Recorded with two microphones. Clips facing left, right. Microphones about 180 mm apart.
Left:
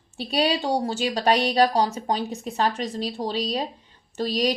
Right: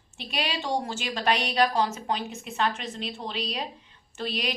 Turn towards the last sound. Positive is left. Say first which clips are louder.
# left 8 dB
turn(degrees=35)  # may be behind; listen again after turning